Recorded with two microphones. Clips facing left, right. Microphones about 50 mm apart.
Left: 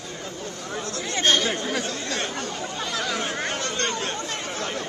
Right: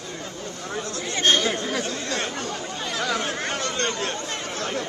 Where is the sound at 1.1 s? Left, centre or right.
Right.